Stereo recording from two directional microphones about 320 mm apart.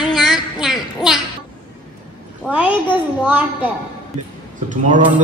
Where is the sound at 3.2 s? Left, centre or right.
Centre.